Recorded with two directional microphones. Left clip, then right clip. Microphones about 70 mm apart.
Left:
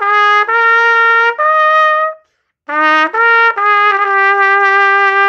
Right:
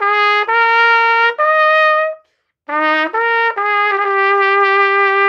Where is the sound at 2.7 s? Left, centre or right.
Left.